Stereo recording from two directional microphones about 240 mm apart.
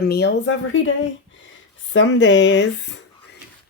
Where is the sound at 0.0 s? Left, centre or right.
Left.